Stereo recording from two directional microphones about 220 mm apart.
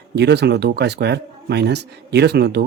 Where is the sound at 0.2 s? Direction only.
50° right (ahead or behind).